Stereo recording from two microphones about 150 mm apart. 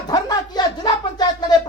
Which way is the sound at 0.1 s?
25° left (ahead or behind).